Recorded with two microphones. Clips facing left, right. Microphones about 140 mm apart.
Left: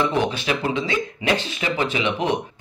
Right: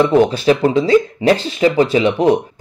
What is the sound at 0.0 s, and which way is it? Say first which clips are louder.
Speech: right 10 dB; 40° right (ahead or behind).